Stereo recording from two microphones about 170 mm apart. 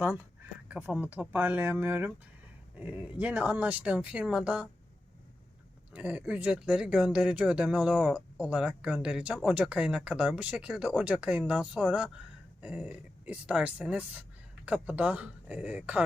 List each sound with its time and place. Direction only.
0.7 s speech: 5° right (ahead or behind)
5.9 s speech: 10° right (ahead or behind)